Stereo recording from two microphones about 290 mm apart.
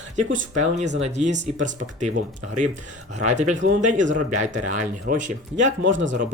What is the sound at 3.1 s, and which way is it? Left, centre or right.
Speech, right.